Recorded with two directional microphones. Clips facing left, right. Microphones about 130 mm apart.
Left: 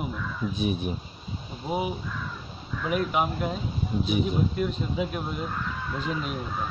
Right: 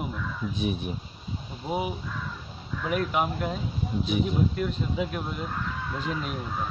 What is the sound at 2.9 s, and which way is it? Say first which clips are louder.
Speech: left 1 dB; 15° left (ahead or behind).